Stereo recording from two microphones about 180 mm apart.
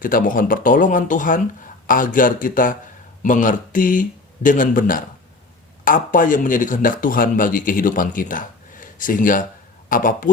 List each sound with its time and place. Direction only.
0.0 s a man's voice: 50° left (ahead or behind)